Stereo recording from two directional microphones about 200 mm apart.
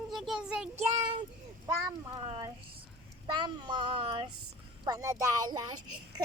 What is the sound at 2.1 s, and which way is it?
A child's voice, 25° right (ahead or behind).